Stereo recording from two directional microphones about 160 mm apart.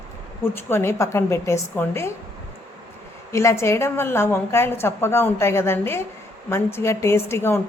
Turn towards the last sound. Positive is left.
turn(degrees=15)  # may be behind; listen again after turning